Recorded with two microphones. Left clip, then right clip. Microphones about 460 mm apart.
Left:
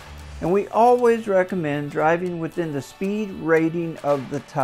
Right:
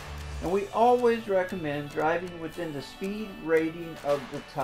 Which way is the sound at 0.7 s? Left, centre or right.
Left.